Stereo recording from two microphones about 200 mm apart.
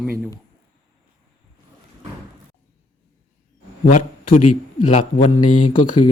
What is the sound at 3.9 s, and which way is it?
A man's voice, 40° left (ahead or behind).